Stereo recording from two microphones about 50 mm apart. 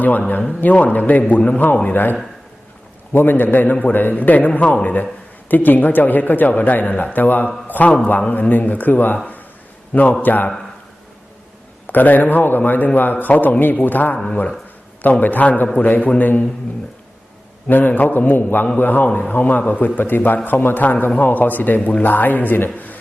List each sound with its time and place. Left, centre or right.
0.6 s a man's voice: left
11.9 s speech: left
14.3 s a man's voice: left
17.7 s a man's voice: left